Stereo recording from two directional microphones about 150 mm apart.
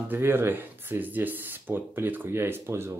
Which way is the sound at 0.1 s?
15° right (ahead or behind).